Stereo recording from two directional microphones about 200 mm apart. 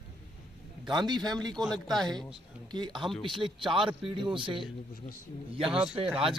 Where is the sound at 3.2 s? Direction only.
25° right (ahead or behind).